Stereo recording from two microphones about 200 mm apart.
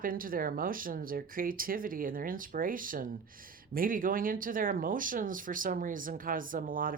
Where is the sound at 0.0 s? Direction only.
45° right (ahead or behind).